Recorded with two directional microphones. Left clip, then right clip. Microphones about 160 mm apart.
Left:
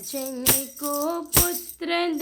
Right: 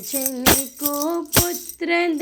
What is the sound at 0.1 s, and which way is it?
Music, 15° right (ahead or behind).